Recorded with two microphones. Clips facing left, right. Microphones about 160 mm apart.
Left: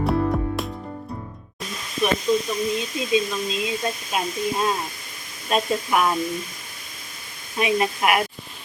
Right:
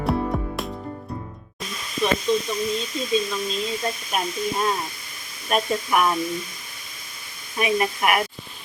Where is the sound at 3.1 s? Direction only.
15° left (ahead or behind).